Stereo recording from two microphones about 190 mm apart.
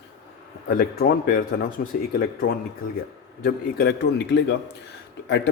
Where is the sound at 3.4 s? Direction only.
60° left (ahead or behind).